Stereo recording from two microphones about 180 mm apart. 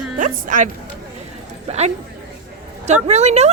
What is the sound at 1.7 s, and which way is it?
Speech, 35° right (ahead or behind).